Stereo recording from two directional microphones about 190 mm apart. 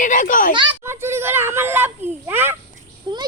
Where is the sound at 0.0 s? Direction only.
45° left (ahead or behind).